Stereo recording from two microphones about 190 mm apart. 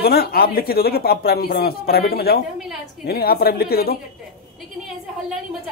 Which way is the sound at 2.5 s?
Centre (ahead or behind).